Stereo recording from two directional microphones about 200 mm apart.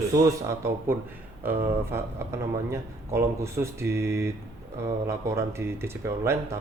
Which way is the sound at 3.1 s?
15° right (ahead or behind).